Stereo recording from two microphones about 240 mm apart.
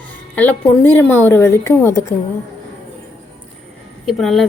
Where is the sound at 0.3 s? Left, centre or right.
Centre.